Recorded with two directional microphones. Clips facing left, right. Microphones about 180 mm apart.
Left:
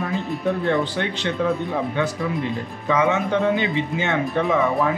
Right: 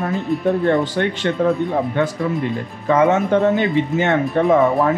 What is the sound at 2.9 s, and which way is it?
Speech, 50° right (ahead or behind).